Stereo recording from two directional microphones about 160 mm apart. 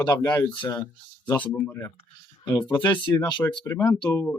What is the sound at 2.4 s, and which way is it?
Speech, 25° left (ahead or behind).